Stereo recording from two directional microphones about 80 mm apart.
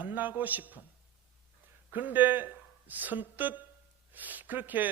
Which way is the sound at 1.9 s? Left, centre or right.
Right.